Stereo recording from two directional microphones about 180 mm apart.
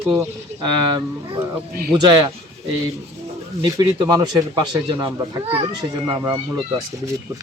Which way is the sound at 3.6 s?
20° right (ahead or behind).